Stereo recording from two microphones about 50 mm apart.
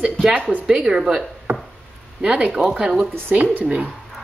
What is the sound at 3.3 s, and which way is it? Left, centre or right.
Speech, right.